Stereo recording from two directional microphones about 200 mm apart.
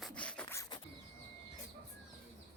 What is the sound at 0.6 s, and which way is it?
Bird, 20° left (ahead or behind).